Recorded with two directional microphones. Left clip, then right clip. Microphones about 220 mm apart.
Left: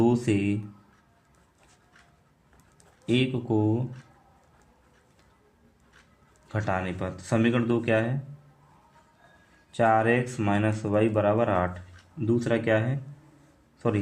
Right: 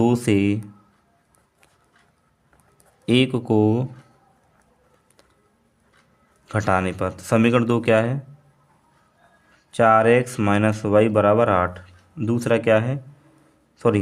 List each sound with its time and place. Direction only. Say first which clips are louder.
0.0 s speech: right 5 dB; 45° right (ahead or behind)
3.1 s speech: right 7 dB; 50° right (ahead or behind)
6.5 s speech: right 8 dB; 50° right (ahead or behind)
9.7 s a man's voice: right 7 dB; 45° right (ahead or behind)